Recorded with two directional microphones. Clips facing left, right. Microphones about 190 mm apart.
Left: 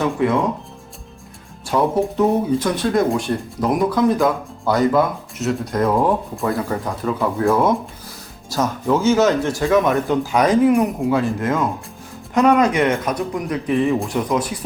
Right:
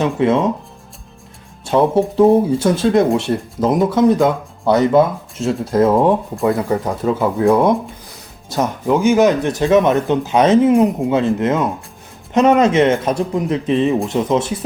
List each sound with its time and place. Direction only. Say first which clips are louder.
0.0 s speech: right 3 dB; 20° right (ahead or behind)
1.6 s speech: right 4 dB; 30° right (ahead or behind)